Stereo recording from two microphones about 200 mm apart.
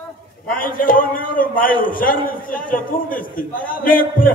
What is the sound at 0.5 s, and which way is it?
A man's voice, 45° left (ahead or behind).